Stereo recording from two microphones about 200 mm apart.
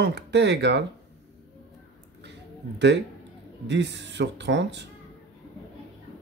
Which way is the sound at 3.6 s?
60° right (ahead or behind).